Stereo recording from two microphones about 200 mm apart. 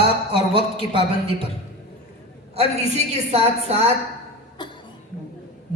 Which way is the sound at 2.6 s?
30° right (ahead or behind).